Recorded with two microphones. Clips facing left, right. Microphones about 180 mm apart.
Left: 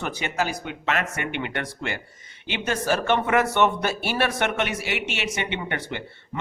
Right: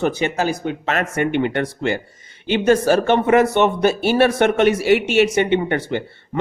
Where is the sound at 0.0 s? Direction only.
30° right (ahead or behind).